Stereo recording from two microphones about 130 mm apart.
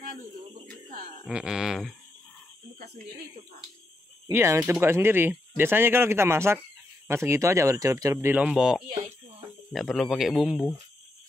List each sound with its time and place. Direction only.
0.8 s speech: 90° right
1.2 s speech: 5° right (ahead or behind)
4.3 s speech: 15° right (ahead or behind)